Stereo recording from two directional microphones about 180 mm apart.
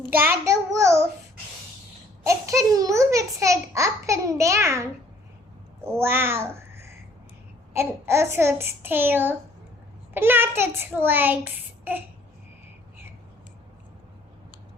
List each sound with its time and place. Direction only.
0.1 s a child's voice: 10° right (ahead or behind)
2.2 s a child's voice: 15° right (ahead or behind)
6.0 s a child's voice: 15° right (ahead or behind)
7.7 s a child's voice: 15° right (ahead or behind)